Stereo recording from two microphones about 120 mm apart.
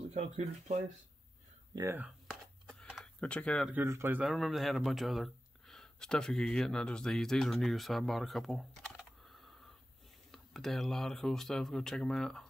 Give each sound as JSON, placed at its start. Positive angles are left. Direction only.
{"t": 0.1, "sound": "speech", "side_deg": -65}
{"t": 1.7, "sound": "speech", "side_deg": -35}
{"t": 3.2, "sound": "speech", "side_deg": 10}
{"t": 3.7, "sound": "speech", "side_deg": -20}
{"t": 4.2, "sound": "speech", "side_deg": 0}